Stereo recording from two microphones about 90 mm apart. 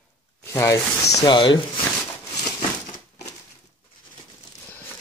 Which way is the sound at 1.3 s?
65° left (ahead or behind).